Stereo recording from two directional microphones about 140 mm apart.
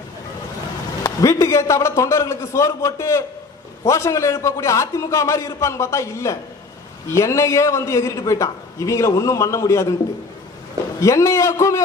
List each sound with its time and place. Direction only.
1.0 s a man's voice: 25° left (ahead or behind)
11.0 s a man's voice: 20° left (ahead or behind)